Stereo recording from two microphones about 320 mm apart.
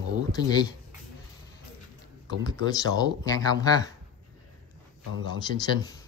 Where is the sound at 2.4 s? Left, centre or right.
Centre.